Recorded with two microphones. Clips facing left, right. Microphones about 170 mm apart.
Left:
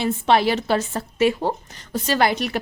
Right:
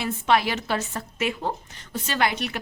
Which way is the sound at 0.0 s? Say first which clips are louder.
Left 4 dB; 30° left (ahead or behind).